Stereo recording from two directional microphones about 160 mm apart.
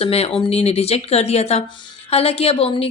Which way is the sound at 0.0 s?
40° left (ahead or behind).